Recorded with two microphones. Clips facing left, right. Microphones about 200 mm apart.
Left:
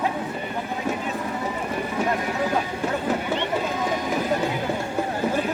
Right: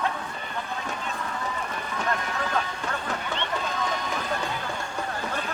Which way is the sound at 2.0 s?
10° left (ahead or behind).